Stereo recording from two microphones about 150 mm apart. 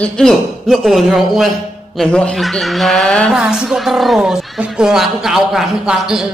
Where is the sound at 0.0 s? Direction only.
5° left (ahead or behind).